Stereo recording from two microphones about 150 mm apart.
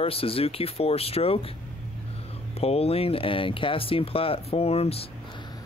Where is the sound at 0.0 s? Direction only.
40° left (ahead or behind).